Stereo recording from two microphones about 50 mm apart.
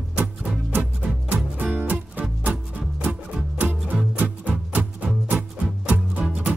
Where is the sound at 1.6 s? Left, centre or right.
Right.